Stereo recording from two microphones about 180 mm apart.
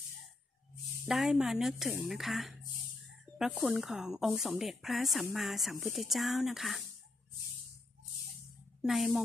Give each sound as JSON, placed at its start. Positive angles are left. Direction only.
{"t": 1.0, "sound": "speech", "side_deg": 0}
{"t": 8.8, "sound": "speech", "side_deg": 0}